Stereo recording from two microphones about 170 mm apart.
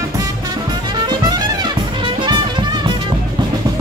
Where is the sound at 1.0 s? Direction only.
25° right (ahead or behind).